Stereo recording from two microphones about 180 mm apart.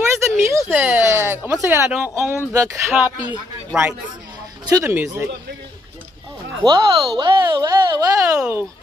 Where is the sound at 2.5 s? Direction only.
15° right (ahead or behind).